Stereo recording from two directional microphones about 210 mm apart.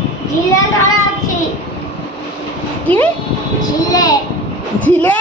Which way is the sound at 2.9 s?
5° left (ahead or behind).